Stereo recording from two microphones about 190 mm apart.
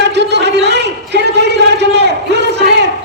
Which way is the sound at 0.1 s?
65° right (ahead or behind).